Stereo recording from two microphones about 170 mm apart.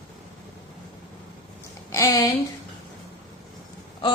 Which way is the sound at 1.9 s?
20° left (ahead or behind).